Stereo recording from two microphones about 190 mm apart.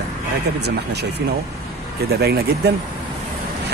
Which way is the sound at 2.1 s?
55° right (ahead or behind).